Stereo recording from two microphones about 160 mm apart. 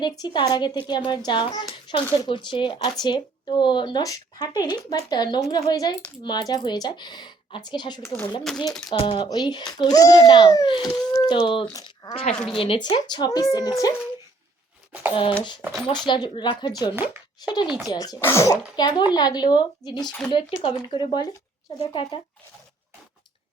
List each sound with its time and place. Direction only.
0.0 s speech: 25° left (ahead or behind)
8.0 s speech: 10° left (ahead or behind)
8.9 s speech: 30° left (ahead or behind)
12.1 s speech: 35° left (ahead or behind)
15.1 s speech: 35° left (ahead or behind)
16.9 s speech: 10° right (ahead or behind)
17.9 s speech: 25° left (ahead or behind)
20.1 s speech: 5° left (ahead or behind)
20.3 s speech: 35° left (ahead or behind)